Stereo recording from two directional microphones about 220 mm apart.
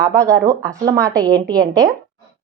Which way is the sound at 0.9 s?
15° right (ahead or behind).